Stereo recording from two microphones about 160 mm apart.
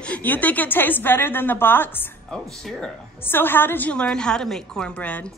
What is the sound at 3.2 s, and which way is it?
Speech, 15° left (ahead or behind).